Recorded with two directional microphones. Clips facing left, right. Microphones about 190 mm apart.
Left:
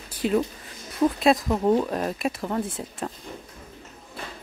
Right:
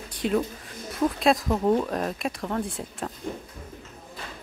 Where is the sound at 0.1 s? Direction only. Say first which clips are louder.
Left 2 dB; centre (ahead or behind).